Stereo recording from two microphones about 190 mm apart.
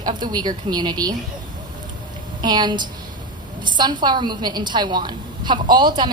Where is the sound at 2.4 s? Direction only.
25° right (ahead or behind).